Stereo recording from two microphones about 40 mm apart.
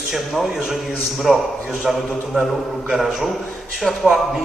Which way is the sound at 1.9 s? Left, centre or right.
Centre.